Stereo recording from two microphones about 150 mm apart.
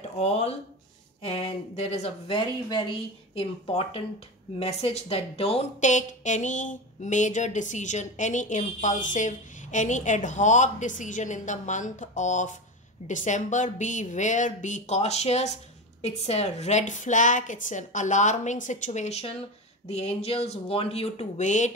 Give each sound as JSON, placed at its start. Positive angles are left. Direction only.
{"t": 0.2, "sound": "speech", "side_deg": 45}